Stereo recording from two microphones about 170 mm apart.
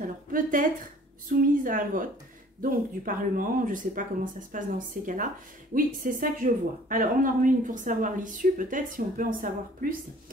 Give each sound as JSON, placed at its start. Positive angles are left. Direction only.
{"t": 0.0, "sound": "a woman's voice", "side_deg": -55}